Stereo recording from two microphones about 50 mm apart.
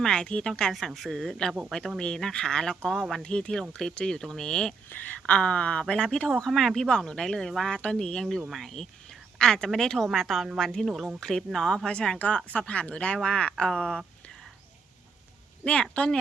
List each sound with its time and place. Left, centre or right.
0.0 s speech: centre
0.7 s speech: centre
3.2 s speech: centre
5.2 s speech: left
6.1 s speech: centre
12.5 s speech: left
13.7 s speech: centre
15.6 s speech: left